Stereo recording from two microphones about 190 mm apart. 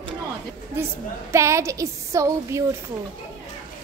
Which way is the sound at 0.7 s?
15° right (ahead or behind).